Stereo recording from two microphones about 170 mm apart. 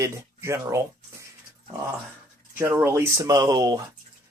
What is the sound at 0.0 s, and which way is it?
Speech, 15° right (ahead or behind).